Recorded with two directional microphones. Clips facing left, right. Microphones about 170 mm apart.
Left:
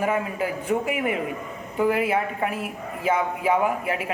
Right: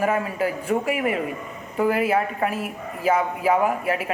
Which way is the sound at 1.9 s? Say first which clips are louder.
Right 2 dB; 20° left (ahead or behind).